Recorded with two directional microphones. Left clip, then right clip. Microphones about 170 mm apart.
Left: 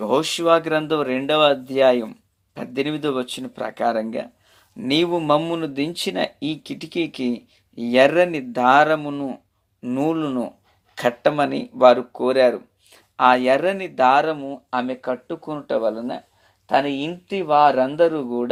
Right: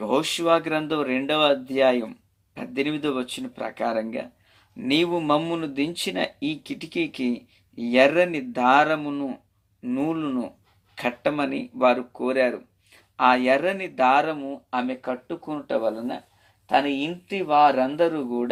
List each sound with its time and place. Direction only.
0.0 s speech: 40° left (ahead or behind)